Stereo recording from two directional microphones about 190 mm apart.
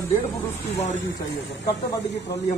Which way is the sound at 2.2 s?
65° left (ahead or behind).